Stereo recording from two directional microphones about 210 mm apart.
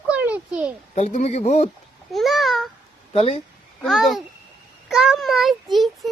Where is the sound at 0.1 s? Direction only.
5° right (ahead or behind).